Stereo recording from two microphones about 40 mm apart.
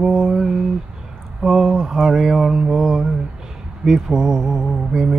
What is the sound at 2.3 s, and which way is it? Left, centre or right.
Mantra, right.